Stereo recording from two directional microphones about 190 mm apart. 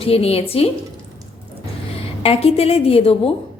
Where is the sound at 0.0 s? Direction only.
30° left (ahead or behind).